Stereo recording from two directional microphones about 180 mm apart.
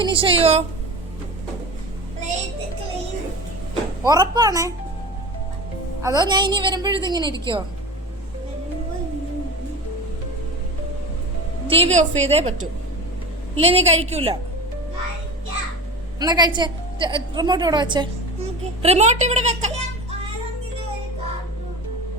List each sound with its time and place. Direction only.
0.0 s a woman's voice: 30° right (ahead or behind)
4.0 s a woman's voice: 20° right (ahead or behind)
6.0 s a woman's voice: 20° right (ahead or behind)
11.7 s a woman's voice: 35° right (ahead or behind)
13.6 s a woman's voice: 35° right (ahead or behind)
16.2 s a woman's voice: 20° right (ahead or behind)
18.8 s a child's voice: 35° right (ahead or behind)